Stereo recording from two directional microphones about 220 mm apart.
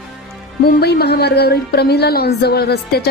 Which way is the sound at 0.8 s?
45° left (ahead or behind).